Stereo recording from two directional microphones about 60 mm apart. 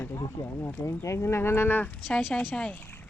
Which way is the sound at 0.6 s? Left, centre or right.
Left.